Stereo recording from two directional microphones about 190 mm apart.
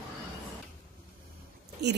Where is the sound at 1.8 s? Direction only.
60° right (ahead or behind).